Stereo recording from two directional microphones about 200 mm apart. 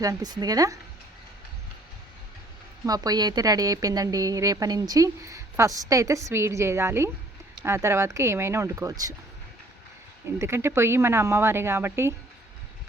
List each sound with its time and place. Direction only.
0.0 s speech: 20° right (ahead or behind)
2.8 s speech: 20° right (ahead or behind)
10.2 s speech: 15° right (ahead or behind)